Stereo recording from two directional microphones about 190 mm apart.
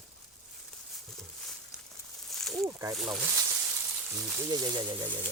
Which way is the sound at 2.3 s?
Centre (ahead or behind).